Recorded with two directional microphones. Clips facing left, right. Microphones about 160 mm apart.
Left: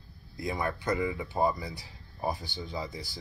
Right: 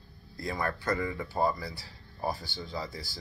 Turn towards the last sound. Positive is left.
turn(degrees=20)  # may be behind; listen again after turning